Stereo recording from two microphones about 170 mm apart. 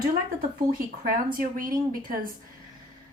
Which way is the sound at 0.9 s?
55° right (ahead or behind).